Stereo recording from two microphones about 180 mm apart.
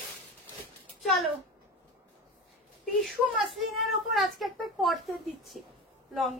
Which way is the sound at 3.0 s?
Centre (ahead or behind).